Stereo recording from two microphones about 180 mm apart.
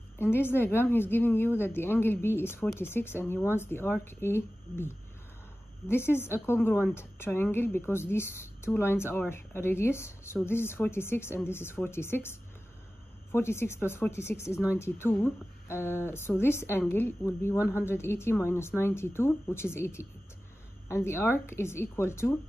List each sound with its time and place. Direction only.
0.2 s a woman's voice: 10° left (ahead or behind)